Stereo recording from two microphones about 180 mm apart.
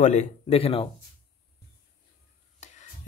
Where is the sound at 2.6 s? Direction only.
40° left (ahead or behind).